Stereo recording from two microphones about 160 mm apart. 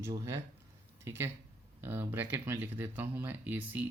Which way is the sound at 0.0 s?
20° right (ahead or behind).